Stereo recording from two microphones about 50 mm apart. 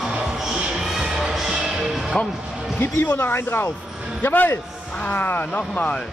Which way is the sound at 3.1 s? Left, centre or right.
Left.